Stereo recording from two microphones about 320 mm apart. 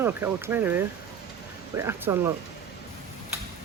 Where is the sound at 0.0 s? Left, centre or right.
Centre.